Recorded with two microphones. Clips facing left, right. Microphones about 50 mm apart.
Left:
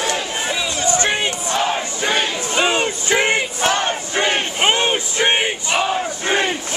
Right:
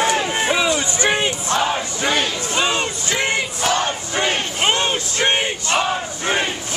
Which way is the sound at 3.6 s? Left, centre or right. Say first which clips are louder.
Left 1 dB; left.